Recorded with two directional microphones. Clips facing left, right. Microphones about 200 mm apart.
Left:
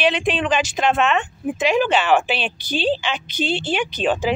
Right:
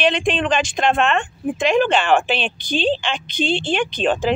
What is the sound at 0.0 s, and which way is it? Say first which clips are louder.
Speech: right 1 dB; 5° left (ahead or behind).